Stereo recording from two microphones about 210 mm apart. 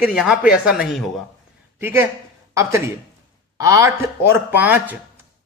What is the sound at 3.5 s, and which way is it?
Speech, 15° right (ahead or behind).